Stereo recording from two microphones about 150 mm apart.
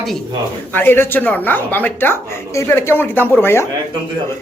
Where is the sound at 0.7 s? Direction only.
15° left (ahead or behind).